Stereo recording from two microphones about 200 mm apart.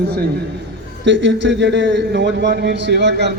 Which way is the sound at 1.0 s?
65° right (ahead or behind).